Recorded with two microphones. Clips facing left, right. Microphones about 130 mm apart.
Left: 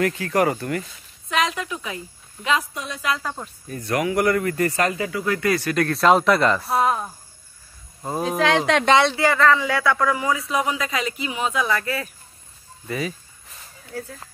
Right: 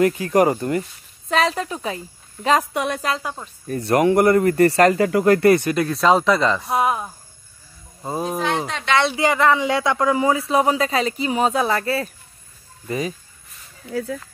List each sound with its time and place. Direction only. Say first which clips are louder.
0.0 s speech: right 4 dB; 20° right (ahead or behind)
1.3 s a man's voice: right 3 dB; 35° right (ahead or behind)
2.7 s speech: right 9 dB; 70° right (ahead or behind)
3.8 s a man's voice: right 5 dB; 30° right (ahead or behind); by 5.4 s 50° right (ahead or behind)
5.8 s speech: even; centre (ahead or behind)
6.8 s speech: even; 10° right (ahead or behind)
8.4 s speech: left 5 dB; 90° left
9.1 s a man's voice: right 1 dB; 20° right (ahead or behind); by 13.1 s 35° right (ahead or behind)